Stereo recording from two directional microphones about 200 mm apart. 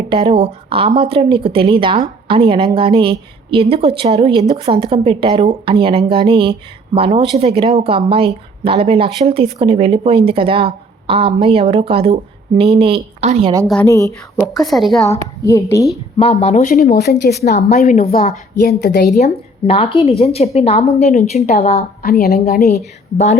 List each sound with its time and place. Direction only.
0.1 s a woman's voice: 25° right (ahead or behind)
13.8 s speech: 15° left (ahead or behind)
14.3 s a woman's voice: centre (ahead or behind)
15.4 s speech: 15° left (ahead or behind)
16.1 s a woman's voice: 30° left (ahead or behind)
16.9 s a woman's voice: 55° left (ahead or behind)
17.7 s a woman's voice: 35° left (ahead or behind)
18.0 s a woman's voice: 45° left (ahead or behind)
19.1 s a woman's voice: 30° left (ahead or behind); by 22.7 s 50° left (ahead or behind)
23.1 s a woman's voice: 35° left (ahead or behind)